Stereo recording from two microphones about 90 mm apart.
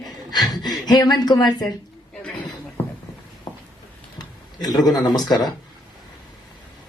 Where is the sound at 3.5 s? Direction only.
55° left (ahead or behind).